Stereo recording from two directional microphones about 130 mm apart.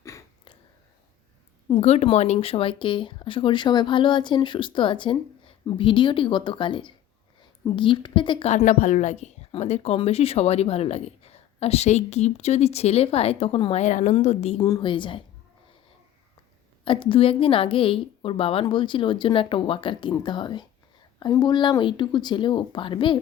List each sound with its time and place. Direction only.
0.0 s a sound: 25° left (ahead or behind)
1.8 s speech: 55° left (ahead or behind)
8.4 s a woman's voice: 70° left (ahead or behind); by 13.8 s 50° left (ahead or behind)
13.8 s a woman's voice: 65° left (ahead or behind)
14.6 s speech: 35° left (ahead or behind)
16.8 s speech: 40° left (ahead or behind)